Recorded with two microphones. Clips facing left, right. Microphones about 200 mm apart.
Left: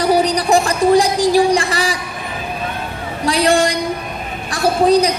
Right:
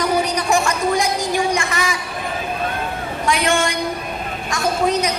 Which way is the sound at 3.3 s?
35° left (ahead or behind).